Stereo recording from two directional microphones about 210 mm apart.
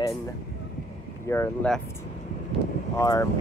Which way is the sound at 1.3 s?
10° left (ahead or behind).